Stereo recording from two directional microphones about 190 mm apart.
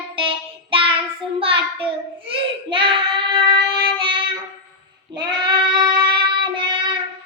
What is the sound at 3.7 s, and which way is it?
Music, 25° right (ahead or behind).